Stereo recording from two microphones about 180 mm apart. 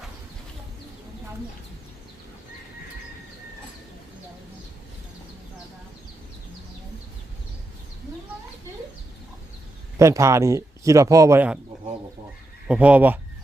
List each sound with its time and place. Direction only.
10.0 s speech: 15° right (ahead or behind)
12.6 s speech: 5° right (ahead or behind)